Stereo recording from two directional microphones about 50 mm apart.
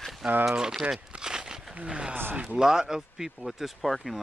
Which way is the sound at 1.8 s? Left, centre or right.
Centre.